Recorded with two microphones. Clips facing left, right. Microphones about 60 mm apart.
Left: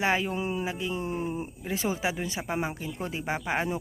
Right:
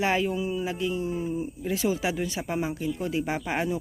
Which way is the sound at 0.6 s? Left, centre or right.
Left.